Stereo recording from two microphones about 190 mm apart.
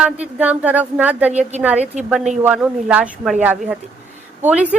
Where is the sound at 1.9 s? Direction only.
40° right (ahead or behind).